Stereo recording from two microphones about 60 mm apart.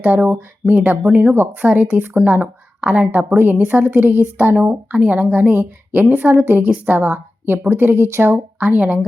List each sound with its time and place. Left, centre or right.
0.0 s a woman's voice: right
8.5 s speech: right